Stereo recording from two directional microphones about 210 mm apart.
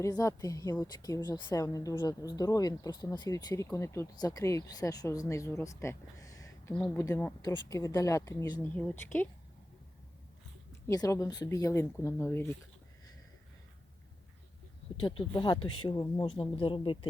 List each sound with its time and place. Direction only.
0.0 s a woman's voice: 15° left (ahead or behind)
10.7 s a woman's voice: 15° left (ahead or behind)
15.3 s speech: 20° left (ahead or behind)